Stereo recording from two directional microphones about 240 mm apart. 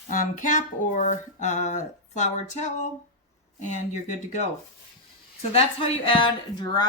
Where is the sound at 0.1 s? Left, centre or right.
Left.